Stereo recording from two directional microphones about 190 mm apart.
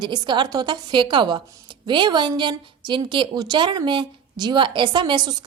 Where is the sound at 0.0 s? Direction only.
25° right (ahead or behind).